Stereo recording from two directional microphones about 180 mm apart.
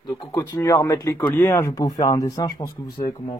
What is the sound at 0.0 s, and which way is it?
Speech, 15° left (ahead or behind).